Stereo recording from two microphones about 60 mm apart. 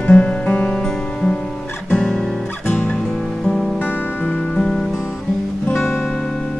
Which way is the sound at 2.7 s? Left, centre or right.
Left.